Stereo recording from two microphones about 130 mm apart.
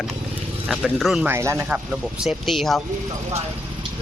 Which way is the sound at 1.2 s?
20° right (ahead or behind).